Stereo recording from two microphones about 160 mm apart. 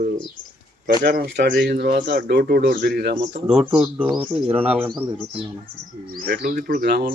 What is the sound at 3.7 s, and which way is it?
Speech, 5° right (ahead or behind).